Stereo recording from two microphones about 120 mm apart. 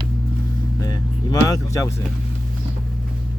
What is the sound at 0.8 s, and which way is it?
Speech, 30° left (ahead or behind).